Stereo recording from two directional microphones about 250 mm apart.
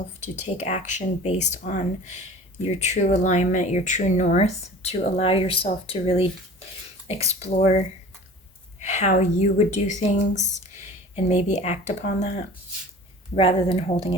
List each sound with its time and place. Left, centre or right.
0.2 s speech: left
7.3 s speech: left
8.8 s speech: left
13.3 s speech: left